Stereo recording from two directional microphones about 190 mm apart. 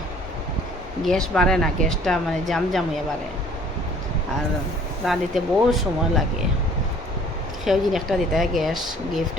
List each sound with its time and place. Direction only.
1.0 s speech: 5° left (ahead or behind)
5.0 s speech: centre (ahead or behind)
7.6 s speech: centre (ahead or behind)